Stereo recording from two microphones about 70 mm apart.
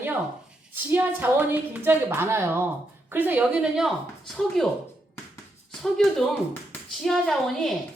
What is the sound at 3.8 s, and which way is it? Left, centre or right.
Speech, centre.